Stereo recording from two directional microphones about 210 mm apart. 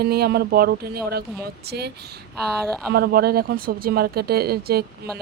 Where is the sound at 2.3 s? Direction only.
Centre (ahead or behind).